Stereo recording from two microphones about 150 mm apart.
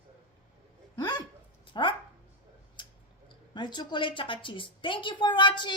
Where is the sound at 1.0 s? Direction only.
25° left (ahead or behind).